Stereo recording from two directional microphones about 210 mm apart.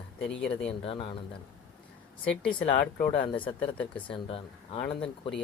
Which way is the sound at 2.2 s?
5° left (ahead or behind).